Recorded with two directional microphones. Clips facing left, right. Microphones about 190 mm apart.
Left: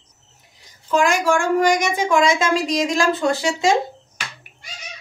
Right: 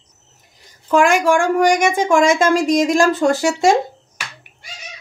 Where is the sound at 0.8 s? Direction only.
55° right (ahead or behind).